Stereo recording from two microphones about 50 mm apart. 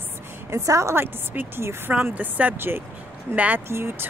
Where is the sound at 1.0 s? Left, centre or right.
Right.